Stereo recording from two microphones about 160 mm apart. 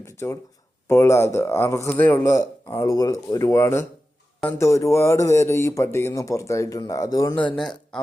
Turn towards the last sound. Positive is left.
turn(degrees=5)  # may be behind; listen again after turning